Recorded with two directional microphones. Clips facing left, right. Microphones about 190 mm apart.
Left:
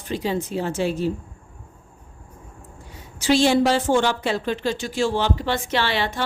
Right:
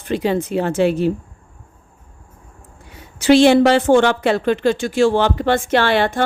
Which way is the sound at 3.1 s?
65° right (ahead or behind).